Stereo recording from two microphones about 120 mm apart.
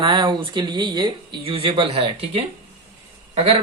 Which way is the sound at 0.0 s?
40° right (ahead or behind).